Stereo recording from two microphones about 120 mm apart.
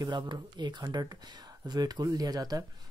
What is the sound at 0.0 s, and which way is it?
Speech, 40° right (ahead or behind).